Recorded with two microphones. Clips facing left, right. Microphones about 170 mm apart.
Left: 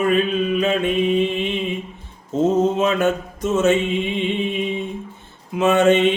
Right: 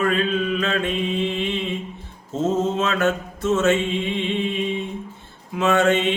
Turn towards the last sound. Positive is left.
turn(degrees=20)  # may be behind; listen again after turning